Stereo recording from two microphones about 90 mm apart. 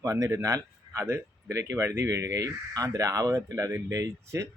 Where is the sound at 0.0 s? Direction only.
35° right (ahead or behind).